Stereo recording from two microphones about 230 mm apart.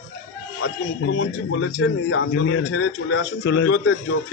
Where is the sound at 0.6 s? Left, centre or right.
Left.